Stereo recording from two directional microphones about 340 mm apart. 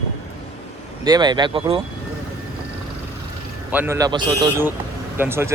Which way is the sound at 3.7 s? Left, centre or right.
Centre.